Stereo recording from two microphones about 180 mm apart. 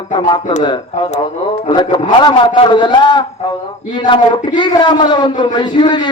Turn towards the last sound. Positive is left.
turn(degrees=25)  # may be behind; listen again after turning